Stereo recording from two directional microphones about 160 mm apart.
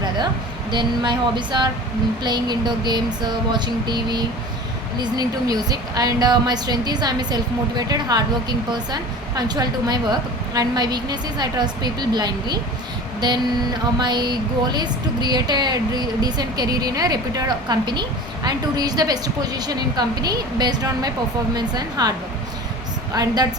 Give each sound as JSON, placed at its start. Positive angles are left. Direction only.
{"t": 0.7, "sound": "a woman's voice", "side_deg": -30}
{"t": 13.1, "sound": "a sound", "side_deg": -25}
{"t": 14.0, "sound": "a woman's voice", "side_deg": -25}
{"t": 23.1, "sound": "a woman's voice", "side_deg": -25}